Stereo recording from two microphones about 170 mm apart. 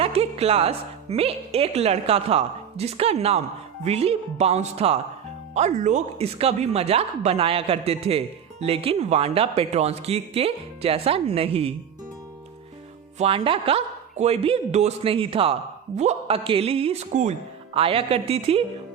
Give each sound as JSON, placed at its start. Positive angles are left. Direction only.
{"t": 0.0, "sound": "a woman's voice", "side_deg": -35}
{"t": 13.1, "sound": "speech", "side_deg": -35}